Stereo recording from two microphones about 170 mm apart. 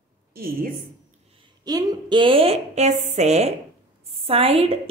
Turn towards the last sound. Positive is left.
turn(degrees=-35)  # may be behind; listen again after turning